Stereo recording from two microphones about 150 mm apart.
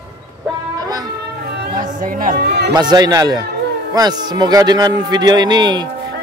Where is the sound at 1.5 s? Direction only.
65° right (ahead or behind); by 2.7 s 90° right.